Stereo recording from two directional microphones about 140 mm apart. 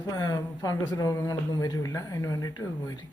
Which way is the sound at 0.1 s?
25° left (ahead or behind).